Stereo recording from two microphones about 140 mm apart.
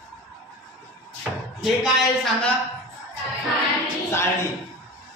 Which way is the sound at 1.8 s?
5° left (ahead or behind).